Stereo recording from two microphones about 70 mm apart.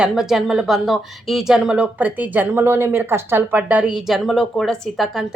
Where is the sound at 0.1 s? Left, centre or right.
Centre.